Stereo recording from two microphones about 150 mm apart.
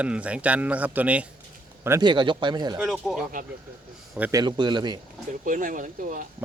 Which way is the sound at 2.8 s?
Centre (ahead or behind).